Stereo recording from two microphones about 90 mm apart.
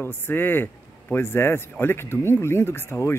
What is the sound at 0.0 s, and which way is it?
Speech, 25° left (ahead or behind).